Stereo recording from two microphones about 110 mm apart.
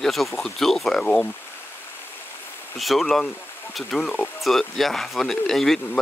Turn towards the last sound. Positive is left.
turn(degrees=5)  # may be behind; listen again after turning